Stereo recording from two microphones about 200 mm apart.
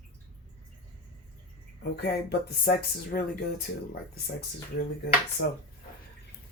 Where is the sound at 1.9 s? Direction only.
55° left (ahead or behind).